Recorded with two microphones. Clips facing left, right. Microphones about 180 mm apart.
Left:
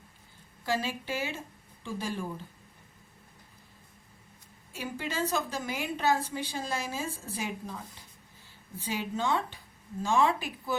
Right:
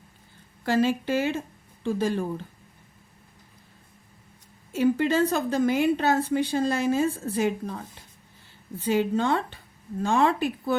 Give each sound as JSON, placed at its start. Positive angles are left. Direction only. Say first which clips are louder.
{"t": 0.6, "sound": "a woman's voice", "louder": "right 9 dB", "side_deg": -60}
{"t": 4.8, "sound": "a woman's voice", "louder": "right 12 dB", "side_deg": -60}